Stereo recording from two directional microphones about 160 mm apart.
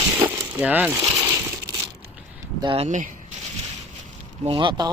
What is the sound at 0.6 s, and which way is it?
Speech, 10° right (ahead or behind).